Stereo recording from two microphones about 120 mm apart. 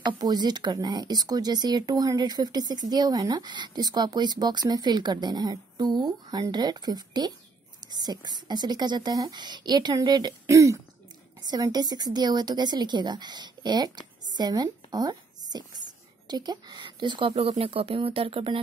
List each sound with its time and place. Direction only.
0.0 s a woman's voice: 35° right (ahead or behind)